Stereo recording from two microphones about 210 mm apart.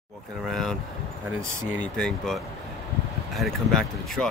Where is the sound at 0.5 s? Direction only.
Centre (ahead or behind).